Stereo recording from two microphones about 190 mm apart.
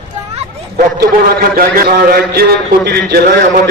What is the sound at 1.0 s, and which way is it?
A man's voice, 50° right (ahead or behind).